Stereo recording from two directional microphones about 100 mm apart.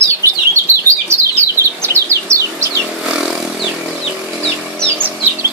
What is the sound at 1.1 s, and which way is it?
Bird, 25° right (ahead or behind).